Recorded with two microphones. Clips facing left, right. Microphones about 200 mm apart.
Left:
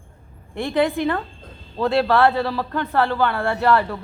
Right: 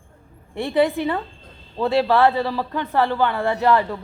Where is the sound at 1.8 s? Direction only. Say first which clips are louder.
Even; 15° right (ahead or behind).